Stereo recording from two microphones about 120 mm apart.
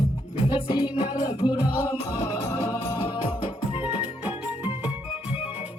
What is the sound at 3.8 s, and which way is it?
Music, 15° right (ahead or behind).